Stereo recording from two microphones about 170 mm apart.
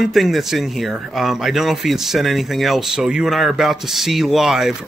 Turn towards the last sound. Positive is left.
turn(degrees=0)  # may be behind; listen again after turning